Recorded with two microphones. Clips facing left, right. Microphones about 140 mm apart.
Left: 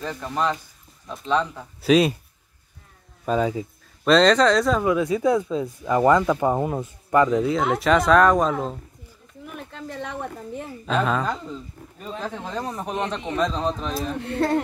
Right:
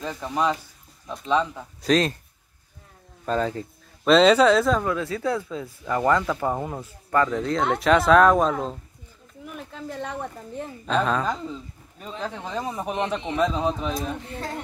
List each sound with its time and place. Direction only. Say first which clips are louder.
0.0 s a man's voice: even; 5° right (ahead or behind)
1.8 s speech: left 4 dB; 10° left (ahead or behind)
3.3 s speech: left 3 dB; 10° left (ahead or behind)
4.8 s speech: left 5 dB; 15° left (ahead or behind)
7.2 s a woman's voice: left 3 dB; 5° left (ahead or behind)
14.2 s speech: left 11 dB; 70° left (ahead or behind)